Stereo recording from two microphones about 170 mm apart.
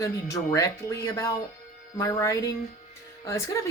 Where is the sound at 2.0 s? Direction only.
15° left (ahead or behind).